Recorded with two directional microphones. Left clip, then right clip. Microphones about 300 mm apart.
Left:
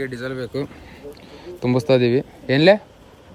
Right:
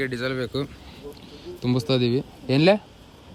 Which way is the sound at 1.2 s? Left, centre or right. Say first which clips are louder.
Left 3 dB; centre.